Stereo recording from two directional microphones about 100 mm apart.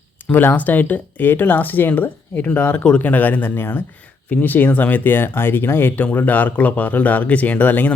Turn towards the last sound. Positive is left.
turn(degrees=15)  # may be behind; listen again after turning